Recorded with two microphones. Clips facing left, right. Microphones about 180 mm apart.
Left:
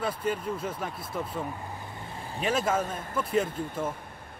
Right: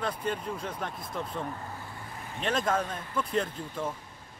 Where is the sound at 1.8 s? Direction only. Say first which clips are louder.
Left 2 dB; 25° left (ahead or behind).